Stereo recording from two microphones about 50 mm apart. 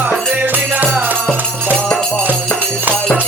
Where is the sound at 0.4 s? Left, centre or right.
Right.